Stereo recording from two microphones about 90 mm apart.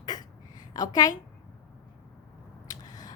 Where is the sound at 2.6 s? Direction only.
40° left (ahead or behind).